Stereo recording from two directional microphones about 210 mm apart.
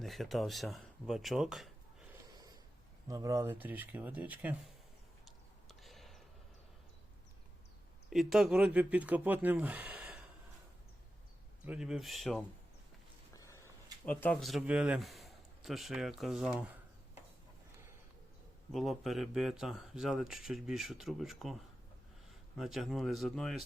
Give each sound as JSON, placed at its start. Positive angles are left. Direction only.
{"t": 0.0, "sound": "speech", "side_deg": 0}
{"t": 2.3, "sound": "snort", "side_deg": -20}
{"t": 3.1, "sound": "speech", "side_deg": -15}
{"t": 5.2, "sound": "a sound", "side_deg": 0}
{"t": 8.1, "sound": "speech", "side_deg": 0}
{"t": 11.6, "sound": "speech", "side_deg": -5}
{"t": 13.3, "sound": "speech", "side_deg": 15}
{"t": 18.7, "sound": "speech", "side_deg": 0}